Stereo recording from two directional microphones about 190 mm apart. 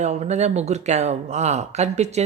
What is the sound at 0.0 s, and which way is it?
Speech, 35° right (ahead or behind).